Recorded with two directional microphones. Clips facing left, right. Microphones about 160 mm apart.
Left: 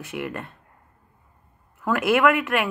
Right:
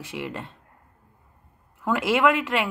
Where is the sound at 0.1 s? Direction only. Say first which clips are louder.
Left 2 dB; 15° right (ahead or behind).